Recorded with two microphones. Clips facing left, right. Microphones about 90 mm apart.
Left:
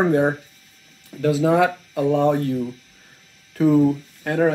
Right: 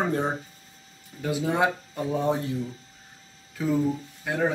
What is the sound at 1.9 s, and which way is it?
Speech, 90° left.